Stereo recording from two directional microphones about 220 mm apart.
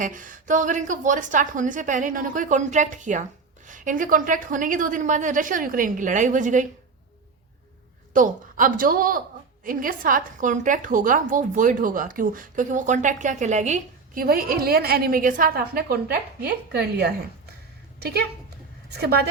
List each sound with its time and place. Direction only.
0.0 s a woman's voice: 35° right (ahead or behind)
8.1 s a woman's voice: 35° right (ahead or behind)
18.9 s a woman's voice: 45° right (ahead or behind)